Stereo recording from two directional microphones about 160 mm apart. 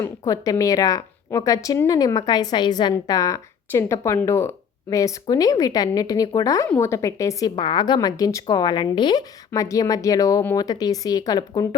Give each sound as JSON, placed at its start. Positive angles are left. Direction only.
{"t": 0.0, "sound": "speech", "side_deg": 20}
{"t": 7.5, "sound": "speech", "side_deg": 30}